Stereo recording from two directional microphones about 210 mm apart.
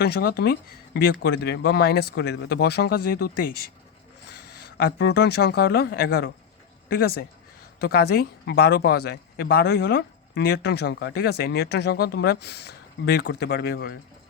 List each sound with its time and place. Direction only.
0.0 s speech: 50° left (ahead or behind)
4.8 s speech: 55° left (ahead or behind)